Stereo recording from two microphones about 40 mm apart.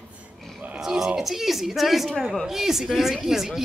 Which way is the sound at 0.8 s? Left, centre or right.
Centre.